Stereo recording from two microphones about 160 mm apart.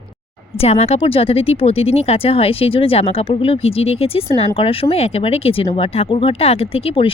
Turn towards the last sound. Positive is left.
turn(degrees=35)  # may be behind; listen again after turning